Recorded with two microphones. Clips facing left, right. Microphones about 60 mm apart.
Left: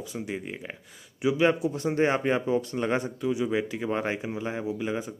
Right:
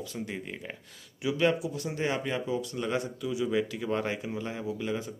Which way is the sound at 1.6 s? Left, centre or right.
Left.